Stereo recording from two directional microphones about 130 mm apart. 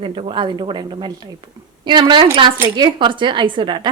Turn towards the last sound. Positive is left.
turn(degrees=-35)  # may be behind; listen again after turning